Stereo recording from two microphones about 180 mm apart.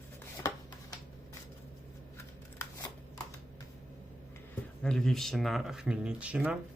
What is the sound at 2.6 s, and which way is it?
Shuffling cards, 15° left (ahead or behind).